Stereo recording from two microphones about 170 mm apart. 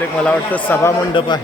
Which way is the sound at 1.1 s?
25° left (ahead or behind).